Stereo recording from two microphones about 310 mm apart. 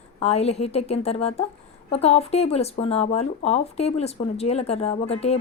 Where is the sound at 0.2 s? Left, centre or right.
Centre.